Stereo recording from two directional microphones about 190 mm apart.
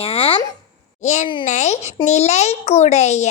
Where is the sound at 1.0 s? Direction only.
40° left (ahead or behind).